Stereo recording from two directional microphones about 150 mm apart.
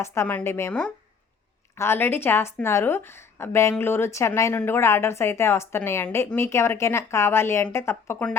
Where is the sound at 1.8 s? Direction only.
15° left (ahead or behind).